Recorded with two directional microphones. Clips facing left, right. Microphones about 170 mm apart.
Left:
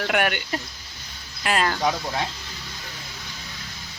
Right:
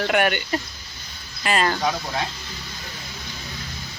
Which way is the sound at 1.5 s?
Centre (ahead or behind).